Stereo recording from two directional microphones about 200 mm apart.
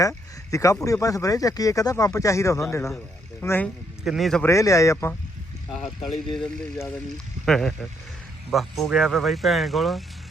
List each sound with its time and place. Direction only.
0.5 s speech: 15° left (ahead or behind)
4.0 s speech: centre (ahead or behind)
4.4 s speech: 15° left (ahead or behind)
5.7 s speech: centre (ahead or behind)